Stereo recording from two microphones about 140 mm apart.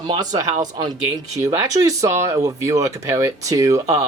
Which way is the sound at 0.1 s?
25° right (ahead or behind).